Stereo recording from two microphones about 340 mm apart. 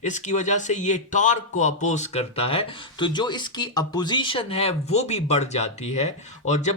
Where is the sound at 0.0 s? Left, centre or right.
Left.